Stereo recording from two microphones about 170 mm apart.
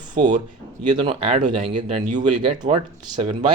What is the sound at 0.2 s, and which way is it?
Speech, 50° right (ahead or behind).